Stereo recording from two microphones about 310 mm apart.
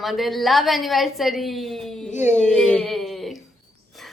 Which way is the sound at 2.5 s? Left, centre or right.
Centre.